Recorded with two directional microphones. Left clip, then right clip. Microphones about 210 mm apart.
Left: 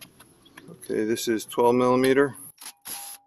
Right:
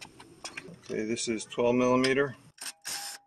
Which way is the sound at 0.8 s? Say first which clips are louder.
Left 7 dB; 40° left (ahead or behind).